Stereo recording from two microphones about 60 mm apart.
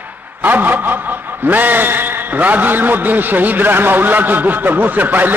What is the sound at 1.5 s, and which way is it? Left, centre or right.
A man's voice, right.